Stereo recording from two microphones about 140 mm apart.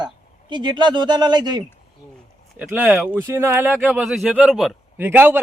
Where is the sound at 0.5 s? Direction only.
35° right (ahead or behind).